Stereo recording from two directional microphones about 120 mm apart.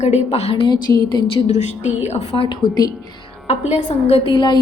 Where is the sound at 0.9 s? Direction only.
35° left (ahead or behind).